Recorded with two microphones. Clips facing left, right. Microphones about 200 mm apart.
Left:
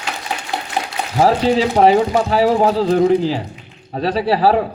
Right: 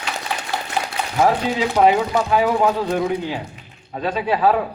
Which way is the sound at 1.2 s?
30° left (ahead or behind).